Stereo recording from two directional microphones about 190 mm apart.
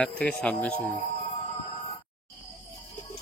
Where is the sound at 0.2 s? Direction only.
5° left (ahead or behind).